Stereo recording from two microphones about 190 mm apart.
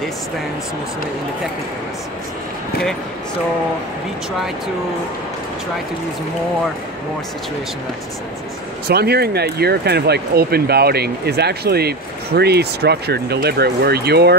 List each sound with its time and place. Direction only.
8.8 s speech: 55° right (ahead or behind)